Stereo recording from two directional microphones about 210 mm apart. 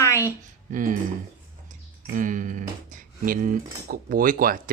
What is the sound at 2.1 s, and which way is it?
Speech, 40° right (ahead or behind).